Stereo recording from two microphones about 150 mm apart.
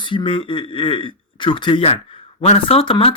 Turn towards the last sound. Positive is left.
turn(degrees=40)  # may be behind; listen again after turning